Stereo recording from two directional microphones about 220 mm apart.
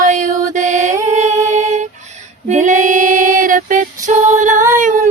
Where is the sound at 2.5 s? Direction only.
35° right (ahead or behind).